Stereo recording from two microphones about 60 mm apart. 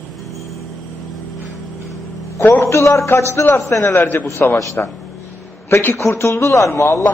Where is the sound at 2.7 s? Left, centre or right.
Left.